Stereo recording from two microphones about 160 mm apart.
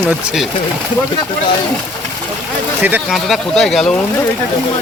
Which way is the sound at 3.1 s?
Centre (ahead or behind).